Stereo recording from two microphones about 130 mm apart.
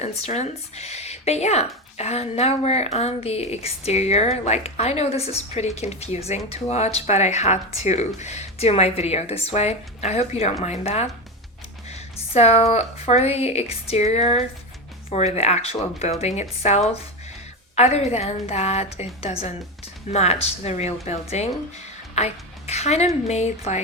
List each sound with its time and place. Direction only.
0.0 s speech: 60° left (ahead or behind)